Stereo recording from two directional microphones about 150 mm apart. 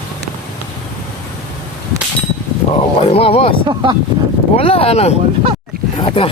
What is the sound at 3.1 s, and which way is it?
Speech, 40° left (ahead or behind).